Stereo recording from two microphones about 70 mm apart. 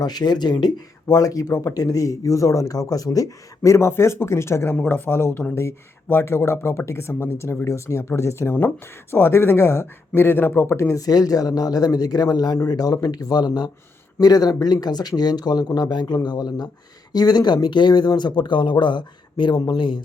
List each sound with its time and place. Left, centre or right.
0.0 s speech: left
11.0 s speech: left